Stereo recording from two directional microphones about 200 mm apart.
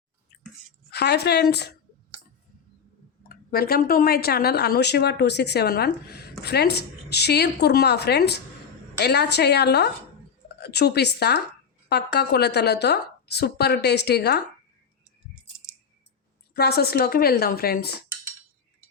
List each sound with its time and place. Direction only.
0.9 s a woman's voice: 55° left (ahead or behind)
3.2 s a woman's voice: 50° left (ahead or behind)
16.6 s speech: 50° left (ahead or behind)